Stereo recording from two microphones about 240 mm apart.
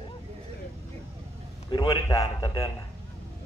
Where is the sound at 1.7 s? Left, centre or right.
Centre.